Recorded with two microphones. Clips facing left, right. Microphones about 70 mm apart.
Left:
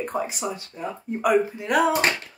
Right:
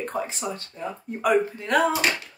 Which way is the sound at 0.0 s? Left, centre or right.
Centre.